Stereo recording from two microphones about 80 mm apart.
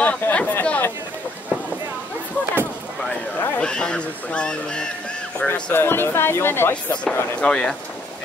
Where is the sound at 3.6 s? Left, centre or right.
Centre.